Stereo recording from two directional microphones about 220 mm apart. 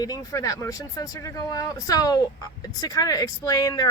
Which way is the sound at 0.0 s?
15° left (ahead or behind).